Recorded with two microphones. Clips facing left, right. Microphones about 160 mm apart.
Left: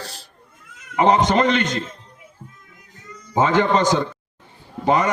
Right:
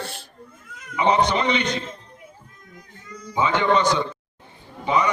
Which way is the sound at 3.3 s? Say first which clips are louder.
Left 3 dB; 45° left (ahead or behind).